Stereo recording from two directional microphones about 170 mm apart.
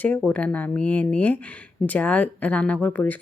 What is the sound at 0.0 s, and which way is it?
Speech, 10° left (ahead or behind).